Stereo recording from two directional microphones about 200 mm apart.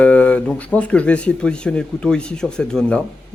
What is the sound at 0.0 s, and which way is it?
Speech, 5° left (ahead or behind).